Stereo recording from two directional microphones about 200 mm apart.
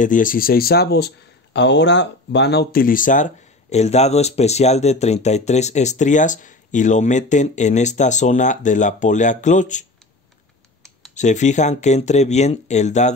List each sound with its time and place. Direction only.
0.0 s speech: 40° left (ahead or behind)
11.1 s speech: 35° left (ahead or behind)